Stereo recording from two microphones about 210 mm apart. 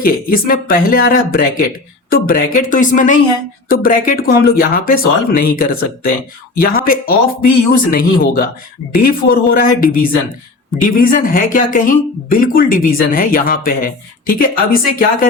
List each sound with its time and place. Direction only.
0.0 s speech: 45° left (ahead or behind)